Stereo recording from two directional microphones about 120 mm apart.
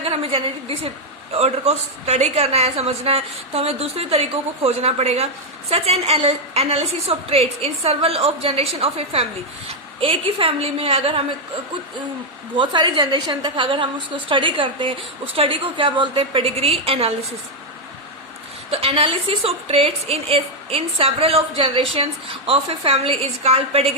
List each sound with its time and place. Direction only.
0.0 s a woman's voice: 50° right (ahead or behind)
12.5 s a woman's voice: 40° right (ahead or behind)
18.7 s a woman's voice: 55° right (ahead or behind)